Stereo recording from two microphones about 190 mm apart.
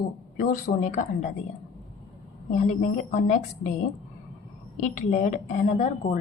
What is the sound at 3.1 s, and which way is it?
Speech, 40° left (ahead or behind).